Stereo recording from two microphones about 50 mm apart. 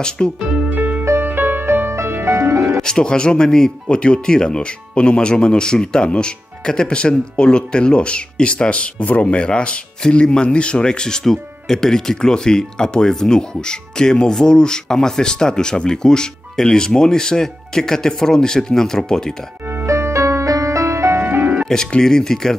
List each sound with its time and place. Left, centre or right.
0.4 s music: centre
0.7 s music: right
2.8 s speech: centre
19.9 s music: right
21.2 s music: right
21.6 s speech: centre